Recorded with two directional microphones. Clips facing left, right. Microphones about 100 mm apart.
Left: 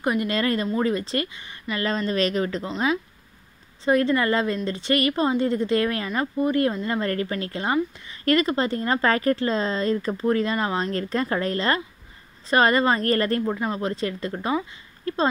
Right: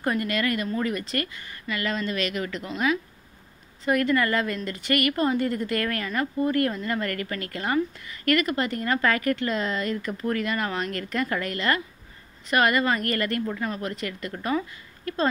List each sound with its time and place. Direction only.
0.0 s speech: 15° left (ahead or behind)
0.3 s a woman's voice: 30° left (ahead or behind)